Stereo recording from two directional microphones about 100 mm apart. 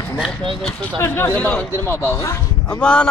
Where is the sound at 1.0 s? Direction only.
20° left (ahead or behind).